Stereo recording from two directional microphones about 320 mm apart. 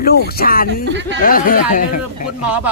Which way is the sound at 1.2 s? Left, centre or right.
Left.